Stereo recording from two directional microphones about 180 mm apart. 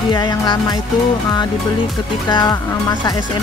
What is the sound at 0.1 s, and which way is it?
Speech, 25° left (ahead or behind).